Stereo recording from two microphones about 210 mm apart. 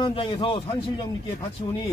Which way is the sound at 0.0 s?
25° left (ahead or behind).